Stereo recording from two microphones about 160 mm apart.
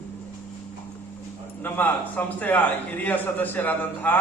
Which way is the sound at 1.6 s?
10° left (ahead or behind).